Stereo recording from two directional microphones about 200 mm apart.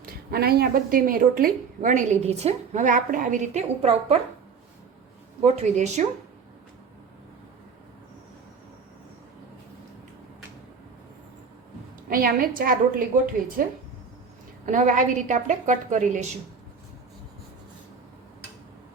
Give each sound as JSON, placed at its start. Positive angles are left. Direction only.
{"t": 0.0, "sound": "a woman's voice", "side_deg": -50}
{"t": 5.4, "sound": "a woman's voice", "side_deg": -35}
{"t": 12.0, "sound": "a woman's voice", "side_deg": -45}
{"t": 14.7, "sound": "a woman's voice", "side_deg": -40}